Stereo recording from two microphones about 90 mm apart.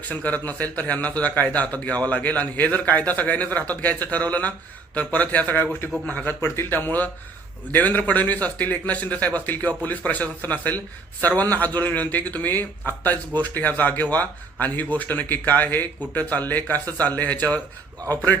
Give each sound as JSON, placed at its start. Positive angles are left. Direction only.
{"t": 0.1, "sound": "speech", "side_deg": 15}